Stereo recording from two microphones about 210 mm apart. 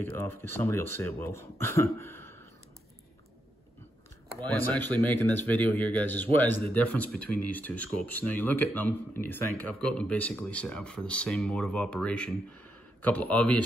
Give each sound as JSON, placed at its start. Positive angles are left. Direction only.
{"t": 0.0, "sound": "speech", "side_deg": 10}
{"t": 4.4, "sound": "speech", "side_deg": 10}